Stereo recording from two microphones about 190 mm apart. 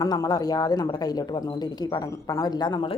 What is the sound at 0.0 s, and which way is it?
A woman's voice, 20° left (ahead or behind).